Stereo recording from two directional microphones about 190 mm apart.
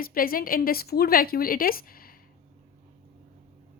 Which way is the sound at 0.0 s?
50° left (ahead or behind).